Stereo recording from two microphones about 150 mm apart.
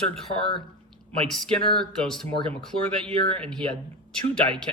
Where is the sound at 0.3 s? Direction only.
35° left (ahead or behind).